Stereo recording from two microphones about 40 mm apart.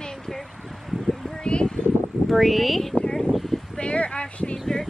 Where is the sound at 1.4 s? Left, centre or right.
Left.